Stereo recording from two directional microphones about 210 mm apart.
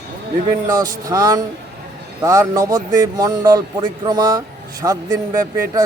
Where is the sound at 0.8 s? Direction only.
15° right (ahead or behind).